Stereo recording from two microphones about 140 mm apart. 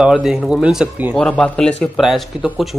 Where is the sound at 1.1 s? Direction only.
10° left (ahead or behind).